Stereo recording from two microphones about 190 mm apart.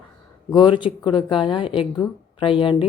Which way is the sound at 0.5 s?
25° left (ahead or behind).